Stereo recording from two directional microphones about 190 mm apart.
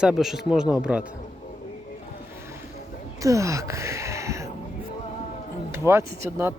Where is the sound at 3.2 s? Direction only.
15° right (ahead or behind).